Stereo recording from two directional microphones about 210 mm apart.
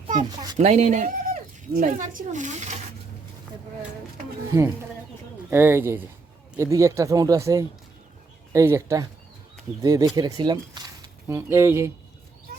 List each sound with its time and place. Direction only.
0.2 s speech: 20° right (ahead or behind)
0.6 s speech: 35° right (ahead or behind)
5.5 s speech: 10° right (ahead or behind)
12.5 s bird: 45° right (ahead or behind)